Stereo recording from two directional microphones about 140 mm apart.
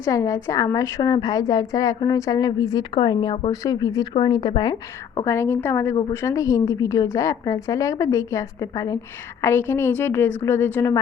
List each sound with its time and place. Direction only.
0.0 s a woman's voice: 25° left (ahead or behind)
5.2 s a woman's voice: 20° left (ahead or behind)